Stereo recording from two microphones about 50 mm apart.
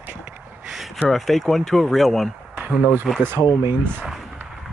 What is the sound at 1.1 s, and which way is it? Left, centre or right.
Speech, centre.